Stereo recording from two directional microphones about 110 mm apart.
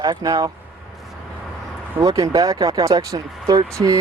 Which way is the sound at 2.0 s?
35° right (ahead or behind).